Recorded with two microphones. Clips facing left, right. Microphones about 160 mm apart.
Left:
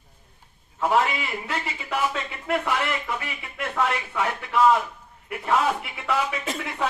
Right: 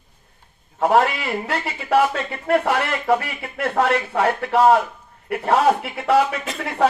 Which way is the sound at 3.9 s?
55° right (ahead or behind).